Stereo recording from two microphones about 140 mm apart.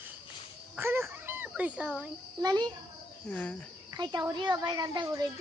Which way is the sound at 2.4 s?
30° right (ahead or behind).